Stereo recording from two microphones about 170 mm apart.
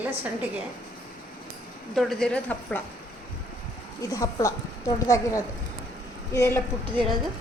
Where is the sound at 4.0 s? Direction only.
20° left (ahead or behind).